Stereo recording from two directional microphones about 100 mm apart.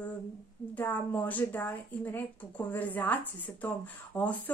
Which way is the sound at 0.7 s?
20° left (ahead or behind).